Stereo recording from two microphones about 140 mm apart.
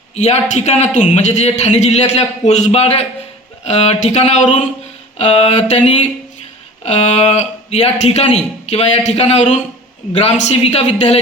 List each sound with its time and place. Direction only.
0.2 s a man's voice: 55° left (ahead or behind)